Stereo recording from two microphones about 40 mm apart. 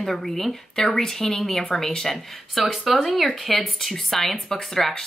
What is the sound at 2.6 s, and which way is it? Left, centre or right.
Speech, centre.